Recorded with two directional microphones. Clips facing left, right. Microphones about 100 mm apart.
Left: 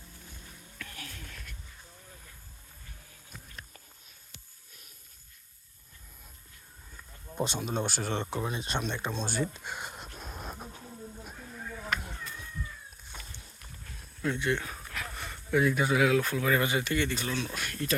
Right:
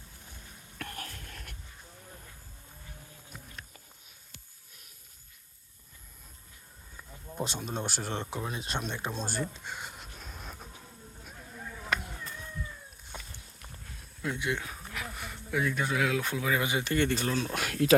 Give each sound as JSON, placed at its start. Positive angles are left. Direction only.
{"t": 0.8, "sound": "whispering", "side_deg": -50}
{"t": 7.3, "sound": "speech", "side_deg": 0}
{"t": 9.6, "sound": "speech", "side_deg": 15}
{"t": 10.0, "sound": "a sound", "side_deg": 40}
{"t": 14.2, "sound": "speech", "side_deg": -10}
{"t": 14.9, "sound": "a sound", "side_deg": -10}
{"t": 15.6, "sound": "speech", "side_deg": 5}
{"t": 16.2, "sound": "speech", "side_deg": -15}
{"t": 16.8, "sound": "speech", "side_deg": -40}
{"t": 17.5, "sound": "speech", "side_deg": -90}